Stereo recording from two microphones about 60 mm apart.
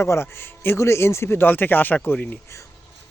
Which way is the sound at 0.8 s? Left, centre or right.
Left.